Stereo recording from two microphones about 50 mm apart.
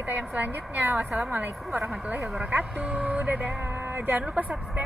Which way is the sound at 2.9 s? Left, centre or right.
Right.